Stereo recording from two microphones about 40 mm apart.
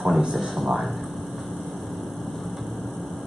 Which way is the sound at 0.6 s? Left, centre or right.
Centre.